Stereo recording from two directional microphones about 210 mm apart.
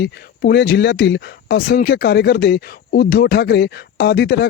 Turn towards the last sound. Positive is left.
turn(degrees=50)  # may be behind; listen again after turning